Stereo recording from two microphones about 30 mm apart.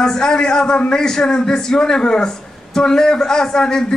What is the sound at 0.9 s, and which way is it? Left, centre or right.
A man's voice, centre.